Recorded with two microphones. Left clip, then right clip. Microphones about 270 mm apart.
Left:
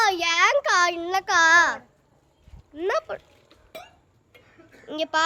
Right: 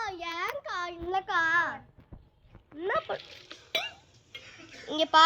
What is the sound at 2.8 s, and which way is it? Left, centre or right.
Speech, centre.